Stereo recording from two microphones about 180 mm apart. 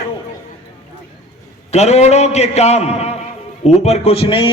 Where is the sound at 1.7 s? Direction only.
35° left (ahead or behind).